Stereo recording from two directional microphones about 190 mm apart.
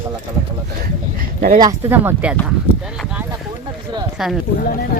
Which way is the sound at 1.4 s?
45° right (ahead or behind).